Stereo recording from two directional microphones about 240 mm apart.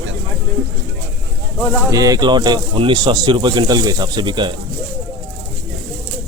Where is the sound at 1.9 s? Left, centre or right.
Centre.